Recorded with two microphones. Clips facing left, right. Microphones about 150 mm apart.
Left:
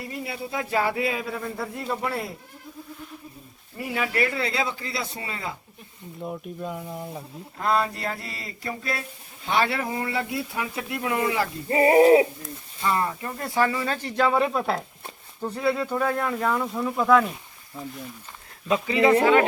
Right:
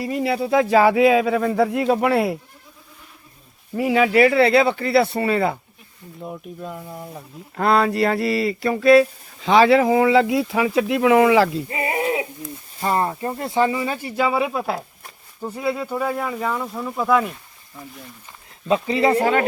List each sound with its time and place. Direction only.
0.0 s a sound: 90° right
3.8 s speech: 90° right; by 5.5 s 70° right (ahead or behind)
6.2 s speech: centre (ahead or behind)
7.5 s a sound: 80° right
11.7 s speech: 35° left (ahead or behind)
12.8 s speech: 40° right (ahead or behind); by 17.3 s 5° right (ahead or behind)
18.7 s speech: 35° right (ahead or behind)